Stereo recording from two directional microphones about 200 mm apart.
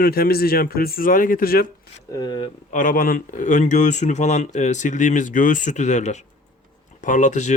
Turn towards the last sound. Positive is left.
turn(degrees=35)  # may be behind; listen again after turning